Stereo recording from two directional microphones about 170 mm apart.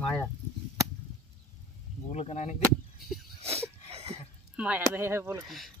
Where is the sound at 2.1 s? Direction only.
40° left (ahead or behind).